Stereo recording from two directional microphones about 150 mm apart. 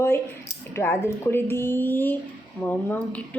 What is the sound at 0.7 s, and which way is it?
Speech, 15° left (ahead or behind).